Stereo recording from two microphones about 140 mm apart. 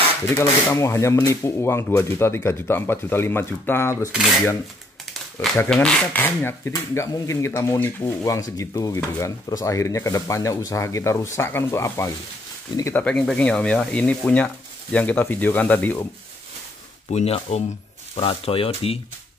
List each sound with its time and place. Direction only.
0.3 s speech: 20° left (ahead or behind)
5.7 s speech: 5° left (ahead or behind); by 13.0 s 20° left (ahead or behind)
13.0 s speech: 5° left (ahead or behind)
17.1 s speech: 50° left (ahead or behind)